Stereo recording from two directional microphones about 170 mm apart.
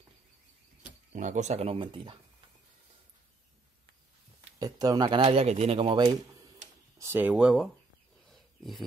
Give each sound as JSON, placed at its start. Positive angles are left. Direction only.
{"t": 1.1, "sound": "speech", "side_deg": -45}
{"t": 4.6, "sound": "speech", "side_deg": -20}
{"t": 8.3, "sound": "wild animals", "side_deg": 0}